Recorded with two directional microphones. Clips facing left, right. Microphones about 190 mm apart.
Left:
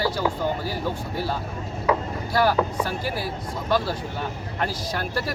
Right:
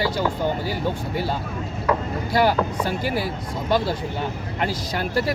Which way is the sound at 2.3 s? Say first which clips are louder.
Right 1 dB; 20° right (ahead or behind).